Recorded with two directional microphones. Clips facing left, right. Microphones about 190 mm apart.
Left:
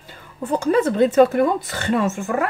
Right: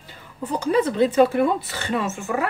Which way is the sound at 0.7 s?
50° left (ahead or behind).